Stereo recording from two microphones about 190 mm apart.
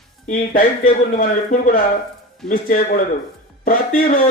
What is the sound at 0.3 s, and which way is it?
A man's voice, 45° left (ahead or behind).